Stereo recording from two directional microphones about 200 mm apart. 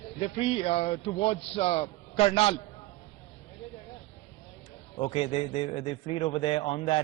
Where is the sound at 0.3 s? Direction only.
30° left (ahead or behind).